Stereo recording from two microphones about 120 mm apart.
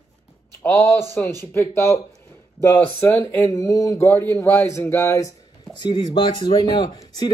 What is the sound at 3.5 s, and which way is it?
Speech, 30° left (ahead or behind).